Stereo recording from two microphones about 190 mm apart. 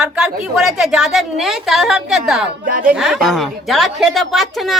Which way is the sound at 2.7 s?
45° right (ahead or behind).